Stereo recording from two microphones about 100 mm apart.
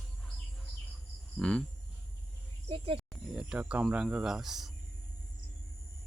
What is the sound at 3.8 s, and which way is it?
Speech, 5° right (ahead or behind).